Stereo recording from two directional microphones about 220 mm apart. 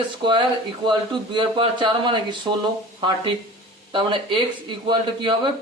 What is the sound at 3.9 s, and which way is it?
Speech, 20° right (ahead or behind).